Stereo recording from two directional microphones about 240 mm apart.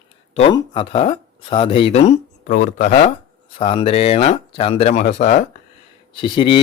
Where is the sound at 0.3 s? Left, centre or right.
Left.